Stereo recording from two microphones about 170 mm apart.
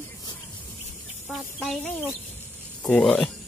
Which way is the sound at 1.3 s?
Centre (ahead or behind).